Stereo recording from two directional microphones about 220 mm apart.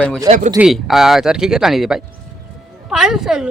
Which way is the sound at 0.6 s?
Centre (ahead or behind).